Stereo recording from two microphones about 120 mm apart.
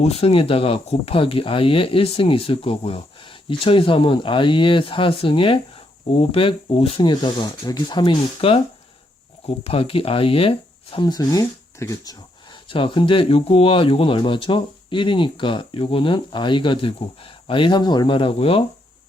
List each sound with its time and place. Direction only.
0.0 s speech: 55° left (ahead or behind)
9.6 s speech: 50° left (ahead or behind)
10.9 s speech: 35° left (ahead or behind)
12.6 s speech: 45° left (ahead or behind)